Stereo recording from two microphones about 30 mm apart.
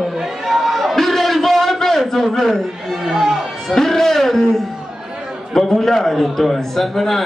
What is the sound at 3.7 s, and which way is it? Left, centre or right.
Speech, centre.